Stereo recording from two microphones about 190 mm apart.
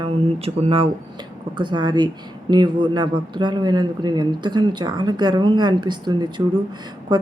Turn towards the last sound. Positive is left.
turn(degrees=-20)  # may be behind; listen again after turning